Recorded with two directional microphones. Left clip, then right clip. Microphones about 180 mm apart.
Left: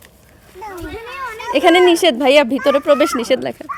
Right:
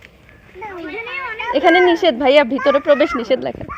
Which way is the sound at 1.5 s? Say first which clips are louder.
Left 1 dB; 35° left (ahead or behind).